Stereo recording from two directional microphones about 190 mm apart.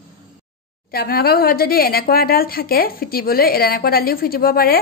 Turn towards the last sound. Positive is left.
turn(degrees=50)  # may be behind; listen again after turning